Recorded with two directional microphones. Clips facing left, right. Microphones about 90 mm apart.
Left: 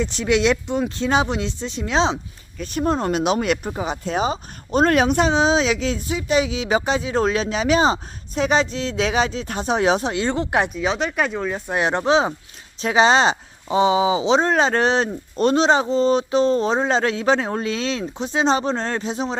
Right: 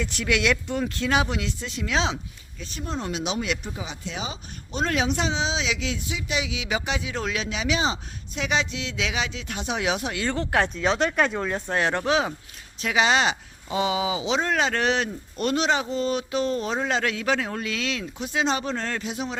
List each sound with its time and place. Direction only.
0.0 s speech: 25° left (ahead or behind)
2.6 s speech: 55° left (ahead or behind); by 10.7 s 20° left (ahead or behind)
10.8 s speech: centre (ahead or behind)
11.7 s speech: 20° left (ahead or behind)